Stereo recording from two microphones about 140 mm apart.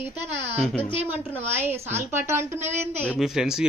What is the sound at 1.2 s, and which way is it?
A woman's voice, 15° right (ahead or behind).